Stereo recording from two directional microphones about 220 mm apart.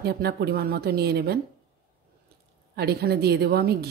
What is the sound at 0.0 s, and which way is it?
Speech, 45° right (ahead or behind).